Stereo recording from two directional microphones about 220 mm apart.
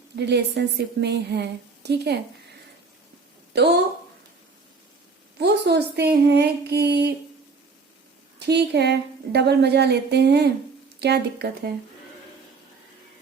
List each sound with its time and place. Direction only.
0.2 s a woman's voice: 50° right (ahead or behind)
3.5 s a woman's voice: 50° right (ahead or behind)
5.4 s a woman's voice: 50° right (ahead or behind)
8.4 s a woman's voice: 50° right (ahead or behind)